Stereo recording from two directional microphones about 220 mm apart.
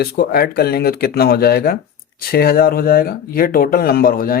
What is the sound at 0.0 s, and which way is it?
Speech, 45° left (ahead or behind).